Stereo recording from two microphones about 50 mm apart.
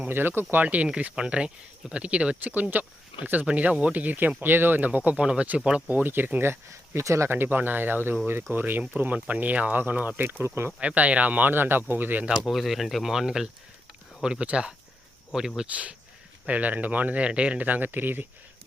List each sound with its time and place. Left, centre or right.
0.1 s speech: right
0.5 s speech: right
1.1 s speech: centre
2.4 s speech: right
4.9 s speech: right
5.9 s speech: right
6.4 s speech: right
7.0 s speech: right
7.3 s speech: right
9.0 s speech: right
10.4 s speech: right
10.8 s speech: right
12.5 s speech: centre
15.6 s speech: right